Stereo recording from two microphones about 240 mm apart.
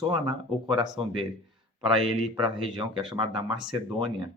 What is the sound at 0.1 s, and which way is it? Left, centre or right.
Speech, centre.